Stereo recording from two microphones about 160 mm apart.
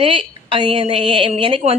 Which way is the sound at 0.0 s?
35° right (ahead or behind).